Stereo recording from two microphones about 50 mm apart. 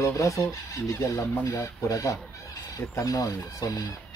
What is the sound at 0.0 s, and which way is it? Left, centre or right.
Speech, left.